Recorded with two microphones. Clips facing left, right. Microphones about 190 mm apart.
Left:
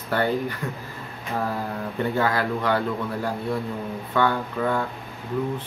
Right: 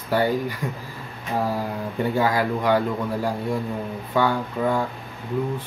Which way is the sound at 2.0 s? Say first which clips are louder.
Right 2 dB; 10° right (ahead or behind).